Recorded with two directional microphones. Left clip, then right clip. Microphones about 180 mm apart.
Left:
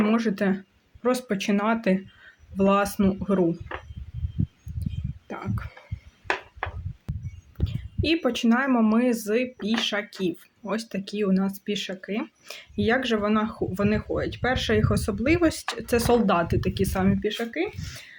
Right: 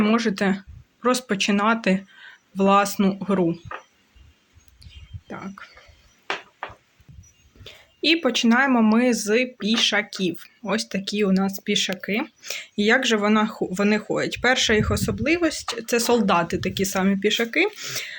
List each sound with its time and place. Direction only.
0.0 s speech: 10° right (ahead or behind)
5.3 s speech: 10° left (ahead or behind)
7.6 s speech: 5° right (ahead or behind)
17.2 s speech: 20° right (ahead or behind)